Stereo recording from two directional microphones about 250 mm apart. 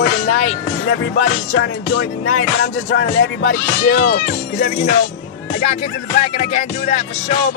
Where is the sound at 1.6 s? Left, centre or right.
Left.